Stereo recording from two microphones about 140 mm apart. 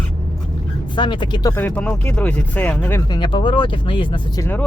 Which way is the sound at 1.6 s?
10° left (ahead or behind).